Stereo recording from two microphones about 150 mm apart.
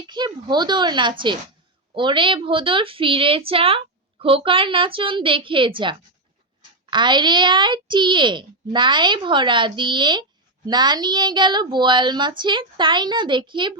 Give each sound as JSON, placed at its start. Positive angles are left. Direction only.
{"t": 0.4, "sound": "a woman's voice", "side_deg": -30}